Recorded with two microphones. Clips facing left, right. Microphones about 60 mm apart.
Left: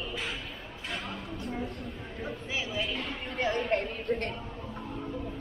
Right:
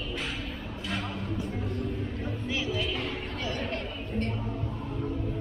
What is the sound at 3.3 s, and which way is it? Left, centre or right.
Chatter, left.